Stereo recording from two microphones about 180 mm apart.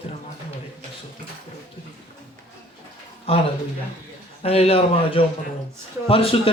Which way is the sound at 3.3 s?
35° left (ahead or behind).